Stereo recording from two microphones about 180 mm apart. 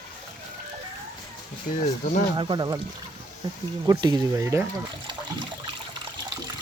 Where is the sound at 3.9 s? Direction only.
25° right (ahead or behind).